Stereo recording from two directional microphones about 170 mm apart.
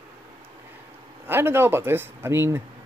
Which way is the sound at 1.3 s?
15° right (ahead or behind).